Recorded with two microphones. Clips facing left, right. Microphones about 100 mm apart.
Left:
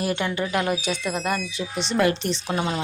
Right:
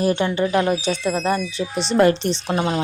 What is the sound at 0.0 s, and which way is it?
A woman's voice, 30° right (ahead or behind).